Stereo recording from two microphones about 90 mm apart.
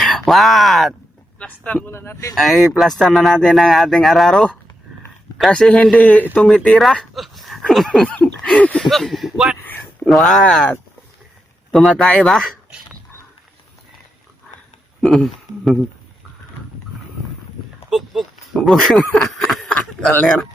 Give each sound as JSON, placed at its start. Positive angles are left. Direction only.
{"t": 0.0, "sound": "speech", "side_deg": 0}
{"t": 1.4, "sound": "a man's voice", "side_deg": 15}
{"t": 1.9, "sound": "speech", "side_deg": 30}
{"t": 2.3, "sound": "a man's voice", "side_deg": 0}
{"t": 8.0, "sound": "a man's voice", "side_deg": 10}
{"t": 8.9, "sound": "speech", "side_deg": 5}
{"t": 15.0, "sound": "speech", "side_deg": 0}
{"t": 17.9, "sound": "speech", "side_deg": 0}